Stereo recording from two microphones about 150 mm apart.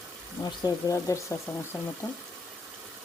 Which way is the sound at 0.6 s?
20° left (ahead or behind).